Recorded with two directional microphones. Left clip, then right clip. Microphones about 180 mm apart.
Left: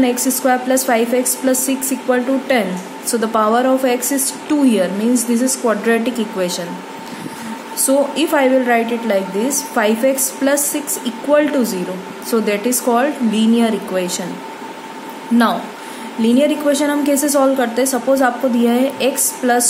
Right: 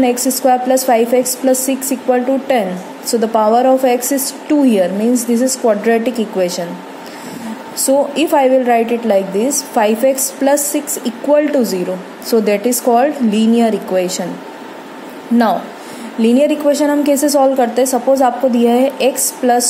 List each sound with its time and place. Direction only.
0.0 s a woman's voice: 20° right (ahead or behind)
7.8 s a woman's voice: 20° right (ahead or behind)
16.2 s a woman's voice: 25° right (ahead or behind)